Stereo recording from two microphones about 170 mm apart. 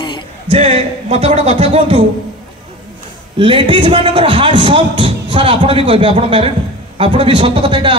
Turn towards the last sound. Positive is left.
turn(degrees=-30)  # may be behind; listen again after turning